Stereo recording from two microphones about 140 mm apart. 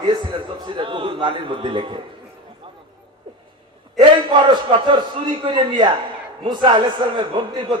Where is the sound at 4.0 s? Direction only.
35° right (ahead or behind).